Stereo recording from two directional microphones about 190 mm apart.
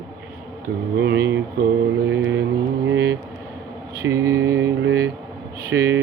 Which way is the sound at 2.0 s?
70° right (ahead or behind).